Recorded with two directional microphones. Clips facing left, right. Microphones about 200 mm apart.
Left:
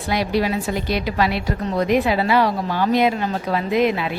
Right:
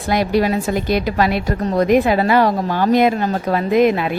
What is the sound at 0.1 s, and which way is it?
A woman's voice, 50° right (ahead or behind).